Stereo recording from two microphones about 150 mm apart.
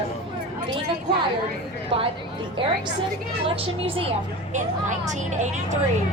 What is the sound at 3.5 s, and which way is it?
Speech, 35° right (ahead or behind).